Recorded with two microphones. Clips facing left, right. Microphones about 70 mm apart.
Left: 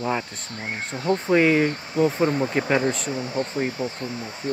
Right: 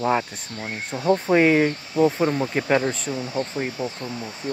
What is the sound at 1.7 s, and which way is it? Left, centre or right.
Speech, left.